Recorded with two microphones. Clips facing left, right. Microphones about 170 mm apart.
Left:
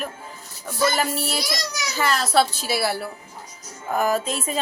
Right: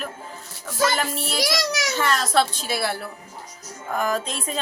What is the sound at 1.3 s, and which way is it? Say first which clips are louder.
Speech: right 4 dB; 90° right.